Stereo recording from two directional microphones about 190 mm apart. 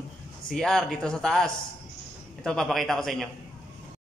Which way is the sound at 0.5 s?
Centre (ahead or behind).